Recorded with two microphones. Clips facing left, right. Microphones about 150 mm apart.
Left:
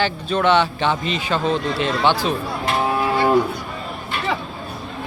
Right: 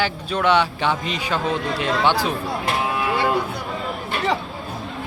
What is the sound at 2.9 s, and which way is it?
Cattle, 35° left (ahead or behind).